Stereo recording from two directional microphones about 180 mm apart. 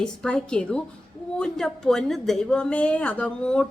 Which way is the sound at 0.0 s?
5° left (ahead or behind).